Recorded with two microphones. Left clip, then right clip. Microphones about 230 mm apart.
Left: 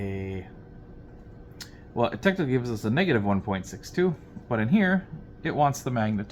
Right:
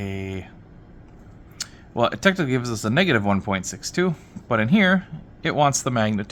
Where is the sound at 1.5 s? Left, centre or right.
Right.